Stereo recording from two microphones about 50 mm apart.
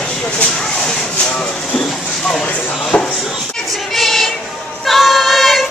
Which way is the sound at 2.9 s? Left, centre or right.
Left.